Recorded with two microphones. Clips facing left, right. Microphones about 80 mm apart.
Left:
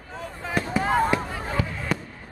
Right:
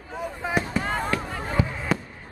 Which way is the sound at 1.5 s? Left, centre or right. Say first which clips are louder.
Right 3 dB; centre.